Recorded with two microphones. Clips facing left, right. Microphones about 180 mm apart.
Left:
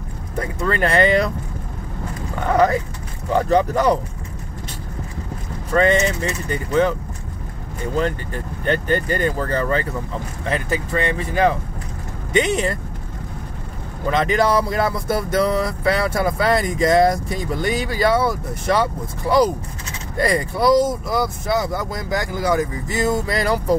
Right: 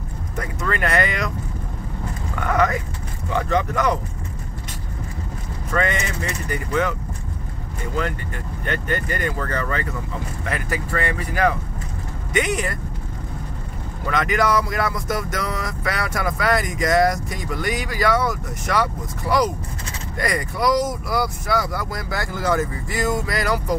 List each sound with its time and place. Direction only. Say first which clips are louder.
0.4 s speech: left 4 dB; 30° left (ahead or behind)
2.4 s speech: left 4 dB; 30° left (ahead or behind)
5.7 s speech: left 7 dB; 30° left (ahead or behind)
8.6 s speech: left 5 dB; 30° left (ahead or behind)
14.1 s speech: left 2 dB; 30° left (ahead or behind)